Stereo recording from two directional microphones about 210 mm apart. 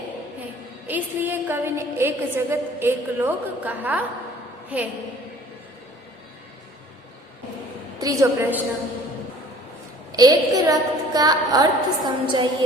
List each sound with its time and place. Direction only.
0.9 s a woman's voice: 10° right (ahead or behind)
7.9 s a woman's voice: 15° right (ahead or behind)
10.1 s a woman's voice: 20° right (ahead or behind)